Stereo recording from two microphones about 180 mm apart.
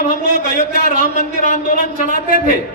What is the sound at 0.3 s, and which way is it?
Speech, 50° right (ahead or behind).